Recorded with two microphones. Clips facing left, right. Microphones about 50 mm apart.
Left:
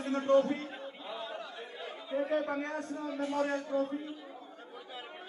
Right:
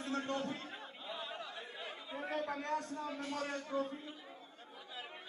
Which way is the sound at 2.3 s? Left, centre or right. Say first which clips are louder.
Left 4 dB; left.